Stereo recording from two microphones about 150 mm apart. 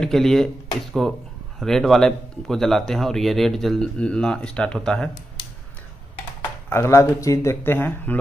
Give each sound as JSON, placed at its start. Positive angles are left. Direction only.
{"t": 0.0, "sound": "speech", "side_deg": 0}
{"t": 6.7, "sound": "speech", "side_deg": 20}